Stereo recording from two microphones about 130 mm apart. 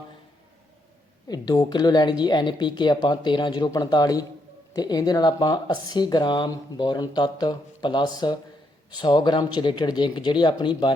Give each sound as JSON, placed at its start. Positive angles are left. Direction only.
{"t": 1.3, "sound": "speech", "side_deg": 30}